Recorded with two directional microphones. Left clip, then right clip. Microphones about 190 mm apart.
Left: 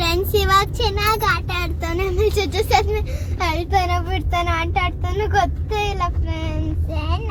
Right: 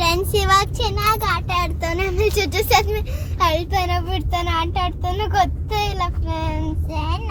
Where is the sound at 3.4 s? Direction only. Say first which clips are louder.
Right 1 dB; 15° right (ahead or behind).